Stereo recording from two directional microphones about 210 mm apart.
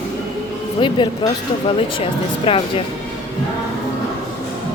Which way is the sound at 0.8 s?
20° left (ahead or behind).